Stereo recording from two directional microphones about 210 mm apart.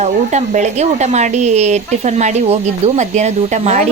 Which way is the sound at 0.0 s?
35° right (ahead or behind).